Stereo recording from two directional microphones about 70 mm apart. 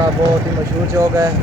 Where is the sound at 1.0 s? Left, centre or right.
Right.